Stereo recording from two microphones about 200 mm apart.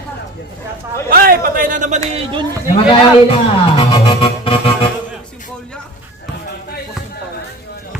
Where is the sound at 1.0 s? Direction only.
45° right (ahead or behind).